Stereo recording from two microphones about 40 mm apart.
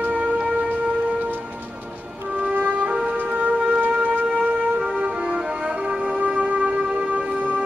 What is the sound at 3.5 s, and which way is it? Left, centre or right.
Wind instrument, right.